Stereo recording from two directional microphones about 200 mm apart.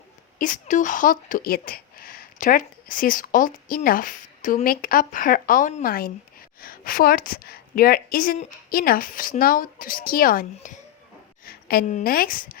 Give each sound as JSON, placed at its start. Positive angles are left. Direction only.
{"t": 0.3, "sound": "a woman's voice", "side_deg": 40}